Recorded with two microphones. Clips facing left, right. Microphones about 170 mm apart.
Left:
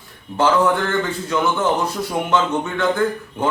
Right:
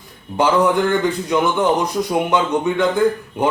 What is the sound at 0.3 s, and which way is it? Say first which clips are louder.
A man's voice: right 1 dB; 15° right (ahead or behind).